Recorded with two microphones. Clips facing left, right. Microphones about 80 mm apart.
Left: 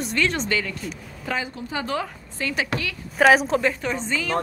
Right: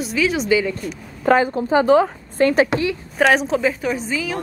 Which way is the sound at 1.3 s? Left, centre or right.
Right.